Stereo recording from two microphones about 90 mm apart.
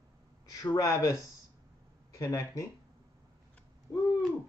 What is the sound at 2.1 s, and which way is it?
Speech, 40° left (ahead or behind).